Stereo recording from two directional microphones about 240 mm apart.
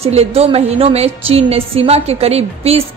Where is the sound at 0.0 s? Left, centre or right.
Right.